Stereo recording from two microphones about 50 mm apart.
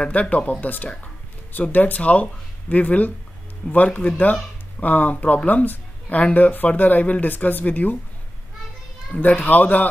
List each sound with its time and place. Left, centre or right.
0.0 s speech: left
9.1 s speech: left